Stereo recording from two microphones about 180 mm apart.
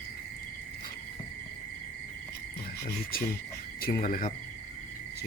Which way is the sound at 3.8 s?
55° left (ahead or behind).